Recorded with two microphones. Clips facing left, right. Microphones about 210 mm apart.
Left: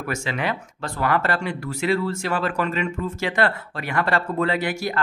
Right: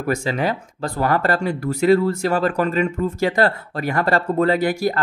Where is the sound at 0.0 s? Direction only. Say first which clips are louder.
Right 5 dB; 35° right (ahead or behind).